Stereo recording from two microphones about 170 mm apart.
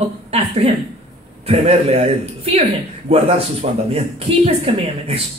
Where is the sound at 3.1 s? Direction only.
35° right (ahead or behind).